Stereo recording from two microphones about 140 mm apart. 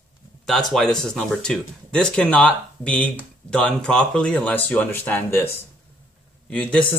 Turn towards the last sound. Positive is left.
turn(degrees=10)  # may be behind; listen again after turning